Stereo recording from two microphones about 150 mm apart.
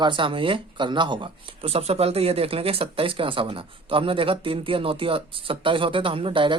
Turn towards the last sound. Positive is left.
turn(degrees=-35)  # may be behind; listen again after turning